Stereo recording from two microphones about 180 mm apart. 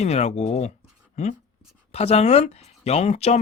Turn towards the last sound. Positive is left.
turn(degrees=35)  # may be behind; listen again after turning